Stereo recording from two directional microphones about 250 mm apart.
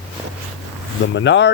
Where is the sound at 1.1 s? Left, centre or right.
Left.